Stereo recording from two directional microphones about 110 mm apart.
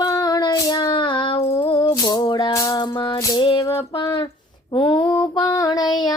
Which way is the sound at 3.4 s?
50° left (ahead or behind).